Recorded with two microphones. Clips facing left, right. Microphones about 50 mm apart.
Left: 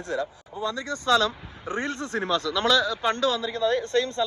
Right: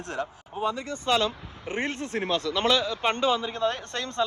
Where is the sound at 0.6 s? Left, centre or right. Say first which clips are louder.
Even; left.